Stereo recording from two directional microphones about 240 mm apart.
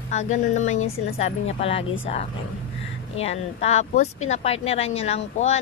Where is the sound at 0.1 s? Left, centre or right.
Left.